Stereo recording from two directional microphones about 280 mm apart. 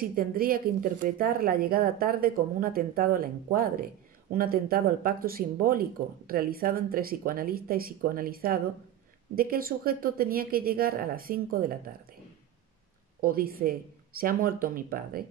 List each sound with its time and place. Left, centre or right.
0.1 s speech: right
13.2 s speech: right